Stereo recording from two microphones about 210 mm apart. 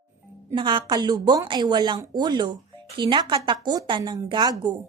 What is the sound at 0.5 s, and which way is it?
Speech, 25° right (ahead or behind).